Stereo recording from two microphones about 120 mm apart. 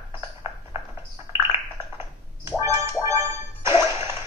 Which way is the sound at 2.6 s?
25° right (ahead or behind).